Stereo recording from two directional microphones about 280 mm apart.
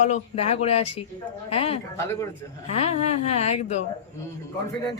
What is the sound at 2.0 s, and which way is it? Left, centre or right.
Speech, centre.